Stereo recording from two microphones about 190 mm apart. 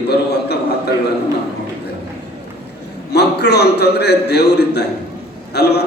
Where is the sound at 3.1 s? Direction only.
60° left (ahead or behind).